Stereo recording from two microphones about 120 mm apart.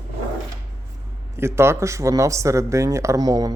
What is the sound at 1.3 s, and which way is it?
Speech, 20° right (ahead or behind).